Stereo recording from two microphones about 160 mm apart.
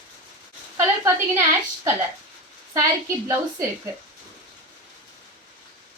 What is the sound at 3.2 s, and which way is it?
Speech, 15° right (ahead or behind).